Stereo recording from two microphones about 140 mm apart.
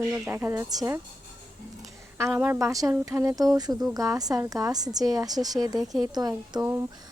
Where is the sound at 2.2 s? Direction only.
15° right (ahead or behind).